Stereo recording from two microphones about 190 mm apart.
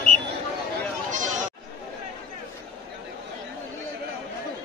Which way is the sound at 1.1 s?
40° right (ahead or behind).